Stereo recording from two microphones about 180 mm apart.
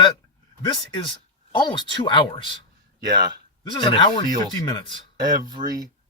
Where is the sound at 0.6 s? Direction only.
25° left (ahead or behind).